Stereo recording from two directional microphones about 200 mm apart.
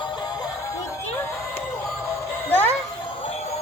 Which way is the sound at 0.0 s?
20° left (ahead or behind).